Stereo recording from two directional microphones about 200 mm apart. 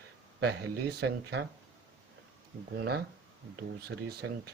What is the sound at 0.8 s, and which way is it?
Speech, 55° right (ahead or behind).